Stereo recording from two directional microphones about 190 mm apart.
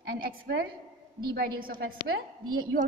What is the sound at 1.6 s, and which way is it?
Speech, 50° right (ahead or behind).